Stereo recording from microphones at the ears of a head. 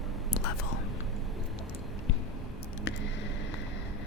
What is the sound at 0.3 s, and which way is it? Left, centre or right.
Whispering, left.